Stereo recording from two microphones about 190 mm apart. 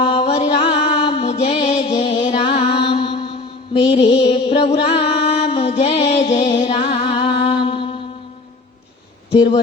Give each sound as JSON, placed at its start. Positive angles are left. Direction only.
{"t": 0.0, "sound": "music", "side_deg": 25}
{"t": 2.1, "sound": "mantra", "side_deg": 30}
{"t": 3.9, "sound": "music", "side_deg": 30}